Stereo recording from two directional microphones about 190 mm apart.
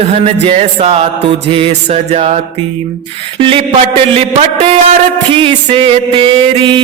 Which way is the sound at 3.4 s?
30° right (ahead or behind).